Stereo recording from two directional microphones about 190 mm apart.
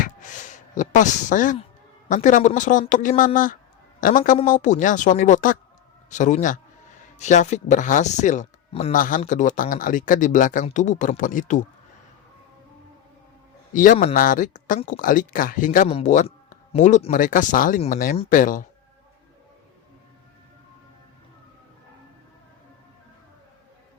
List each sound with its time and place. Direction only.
0.0 s a sound: 40° left (ahead or behind)
2.0 s speech: 40° left (ahead or behind)
13.7 s speech: 40° left (ahead or behind)